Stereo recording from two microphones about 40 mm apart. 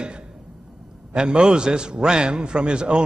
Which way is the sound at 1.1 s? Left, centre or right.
Right.